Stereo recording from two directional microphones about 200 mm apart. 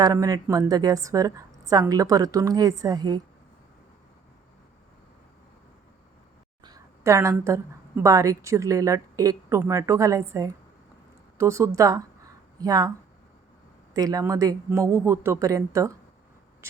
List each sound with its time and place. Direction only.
0.0 s a woman's voice: 20° right (ahead or behind)
6.7 s a woman's voice: 15° right (ahead or behind)
13.9 s a woman's voice: 15° right (ahead or behind)